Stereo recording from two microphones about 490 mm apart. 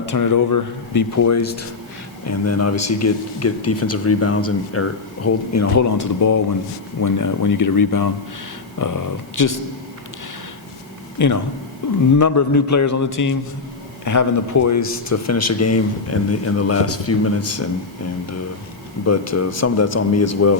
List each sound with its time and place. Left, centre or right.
0.1 s speech: left
11.2 s speech: left
19.0 s speech: left